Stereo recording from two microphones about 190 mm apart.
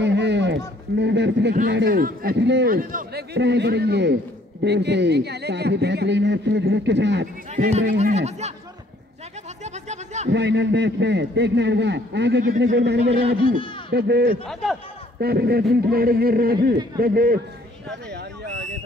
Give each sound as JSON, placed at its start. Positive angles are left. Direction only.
{"t": 0.0, "sound": "a sound", "side_deg": -65}
{"t": 0.9, "sound": "a man's voice", "side_deg": -65}
{"t": 1.9, "sound": "a man's voice", "side_deg": -50}
{"t": 7.5, "sound": "speech", "side_deg": -40}
{"t": 9.8, "sound": "a sound", "side_deg": -35}
{"t": 10.3, "sound": "a man's voice", "side_deg": -65}
{"t": 14.5, "sound": "speech", "side_deg": 0}
{"t": 15.1, "sound": "speech", "side_deg": -60}